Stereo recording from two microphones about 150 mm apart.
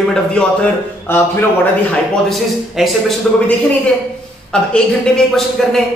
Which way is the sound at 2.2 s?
Centre (ahead or behind).